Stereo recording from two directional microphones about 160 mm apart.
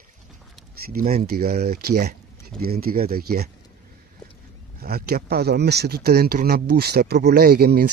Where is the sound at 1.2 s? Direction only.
75° right (ahead or behind).